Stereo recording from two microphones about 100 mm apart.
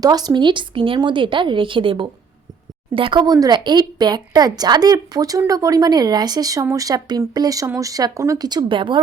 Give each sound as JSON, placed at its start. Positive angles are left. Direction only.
{"t": 0.0, "sound": "speech", "side_deg": -40}
{"t": 8.4, "sound": "speech", "side_deg": -50}